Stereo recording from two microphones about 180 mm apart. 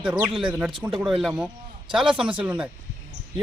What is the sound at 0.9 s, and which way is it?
Speech, centre (ahead or behind).